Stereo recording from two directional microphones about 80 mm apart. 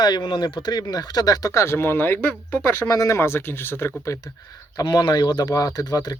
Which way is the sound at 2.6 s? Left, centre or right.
Left.